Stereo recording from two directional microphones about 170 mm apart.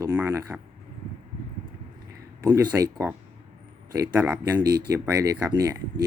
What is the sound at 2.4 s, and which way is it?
Speech, 20° right (ahead or behind).